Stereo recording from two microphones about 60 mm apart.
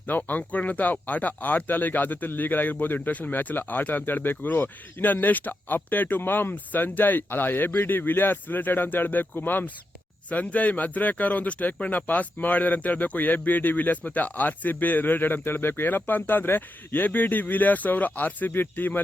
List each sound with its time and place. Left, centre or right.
0.2 s speech: left